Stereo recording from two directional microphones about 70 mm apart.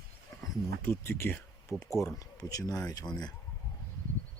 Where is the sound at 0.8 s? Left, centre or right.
Left.